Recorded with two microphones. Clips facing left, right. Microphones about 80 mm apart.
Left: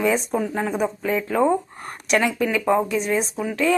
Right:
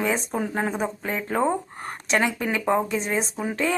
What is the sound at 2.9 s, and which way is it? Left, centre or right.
Speech, right.